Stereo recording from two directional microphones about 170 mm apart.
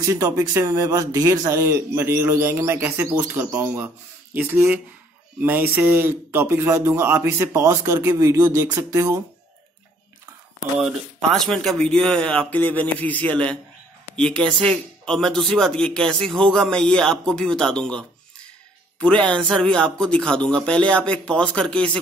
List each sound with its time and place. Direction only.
0.0 s speech: 20° right (ahead or behind)
10.8 s a man's voice: centre (ahead or behind)